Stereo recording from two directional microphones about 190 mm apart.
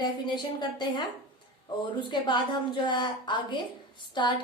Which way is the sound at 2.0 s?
25° left (ahead or behind).